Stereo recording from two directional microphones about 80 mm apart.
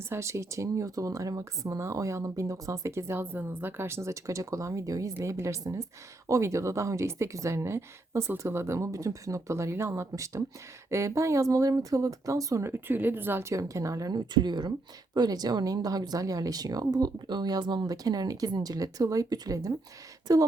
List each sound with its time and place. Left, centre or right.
0.1 s speech: right
13.5 s speech: right